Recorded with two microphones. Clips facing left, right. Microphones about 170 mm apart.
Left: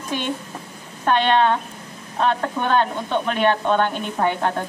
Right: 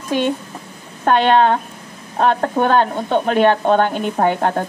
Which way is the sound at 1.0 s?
40° right (ahead or behind).